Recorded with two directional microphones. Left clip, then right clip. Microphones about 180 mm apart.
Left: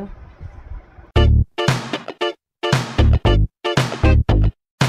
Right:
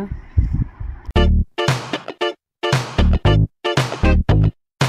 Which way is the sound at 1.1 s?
Centre (ahead or behind).